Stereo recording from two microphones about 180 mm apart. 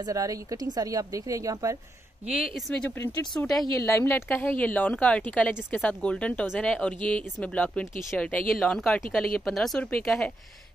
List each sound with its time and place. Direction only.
0.0 s speech: 20° right (ahead or behind)
3.0 s speech: 15° left (ahead or behind)